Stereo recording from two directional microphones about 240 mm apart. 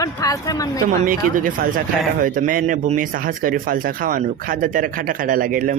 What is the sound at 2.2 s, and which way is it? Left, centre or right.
Speech, right.